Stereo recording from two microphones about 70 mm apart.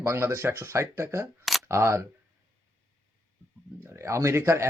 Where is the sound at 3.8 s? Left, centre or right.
Right.